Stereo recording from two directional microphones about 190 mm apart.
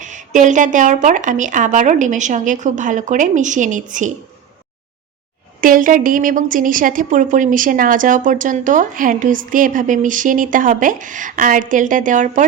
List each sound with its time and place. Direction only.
0.0 s speech: 40° right (ahead or behind)
5.5 s a woman's voice: 45° right (ahead or behind)